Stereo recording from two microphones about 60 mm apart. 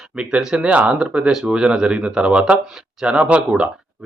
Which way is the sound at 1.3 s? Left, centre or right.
Centre.